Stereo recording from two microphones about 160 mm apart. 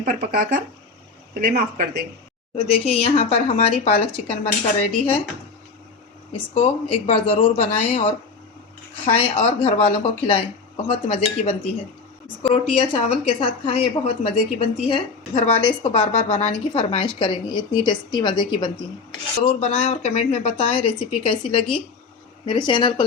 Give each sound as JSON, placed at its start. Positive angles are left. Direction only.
{"t": 0.0, "sound": "speech", "side_deg": -65}
{"t": 2.6, "sound": "a woman's voice", "side_deg": 40}
{"t": 6.3, "sound": "a woman's voice", "side_deg": 35}
{"t": 12.9, "sound": "a woman's voice", "side_deg": 35}